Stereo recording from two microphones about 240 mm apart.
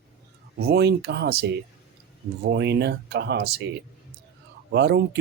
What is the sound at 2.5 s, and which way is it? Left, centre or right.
Speech, right.